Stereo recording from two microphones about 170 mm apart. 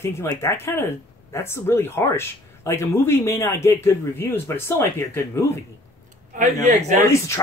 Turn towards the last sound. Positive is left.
turn(degrees=15)  # may be behind; listen again after turning